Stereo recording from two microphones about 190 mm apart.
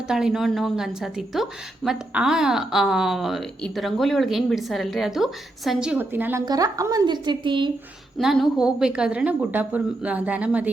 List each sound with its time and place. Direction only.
0.1 s a woman's voice: 5° right (ahead or behind); by 7.7 s 25° right (ahead or behind)
8.2 s a woman's voice: centre (ahead or behind)